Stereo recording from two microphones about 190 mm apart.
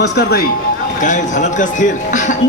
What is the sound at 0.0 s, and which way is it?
Speech, 60° left (ahead or behind).